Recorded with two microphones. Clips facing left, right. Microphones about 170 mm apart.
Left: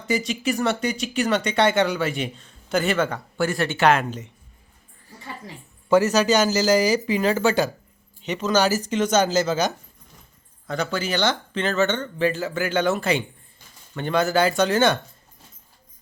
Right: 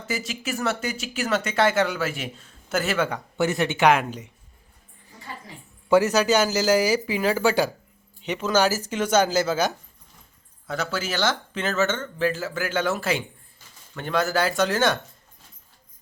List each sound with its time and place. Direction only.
0.1 s speech: 5° right (ahead or behind)
3.3 s speech: 20° right (ahead or behind)
5.9 s speech: 10° right (ahead or behind)